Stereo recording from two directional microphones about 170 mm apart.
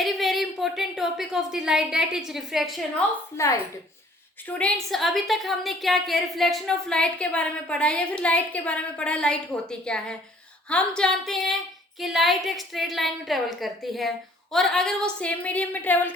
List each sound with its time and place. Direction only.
0.0 s a woman's voice: centre (ahead or behind)
3.3 s speech: 20° left (ahead or behind)
4.4 s a woman's voice: 5° left (ahead or behind)